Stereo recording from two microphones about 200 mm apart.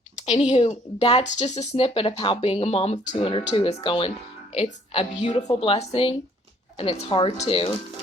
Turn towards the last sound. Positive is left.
turn(degrees=25)  # may be behind; listen again after turning